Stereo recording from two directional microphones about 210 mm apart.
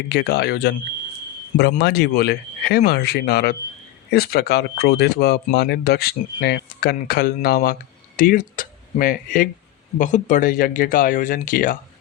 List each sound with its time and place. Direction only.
0.1 s speech: 50° left (ahead or behind)
1.8 s speech: 50° left (ahead or behind)